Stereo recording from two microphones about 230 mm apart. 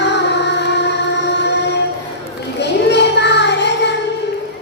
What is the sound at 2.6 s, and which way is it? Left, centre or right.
Music, left.